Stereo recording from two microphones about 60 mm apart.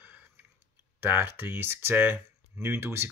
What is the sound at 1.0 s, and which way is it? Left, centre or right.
Speech, right.